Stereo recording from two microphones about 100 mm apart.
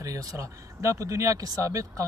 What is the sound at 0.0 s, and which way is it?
Speech, 35° right (ahead or behind).